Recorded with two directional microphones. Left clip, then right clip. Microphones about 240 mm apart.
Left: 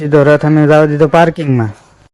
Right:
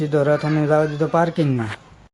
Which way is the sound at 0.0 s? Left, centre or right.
Left.